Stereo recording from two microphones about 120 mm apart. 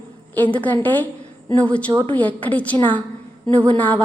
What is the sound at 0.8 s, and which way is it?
A woman's voice, 15° left (ahead or behind).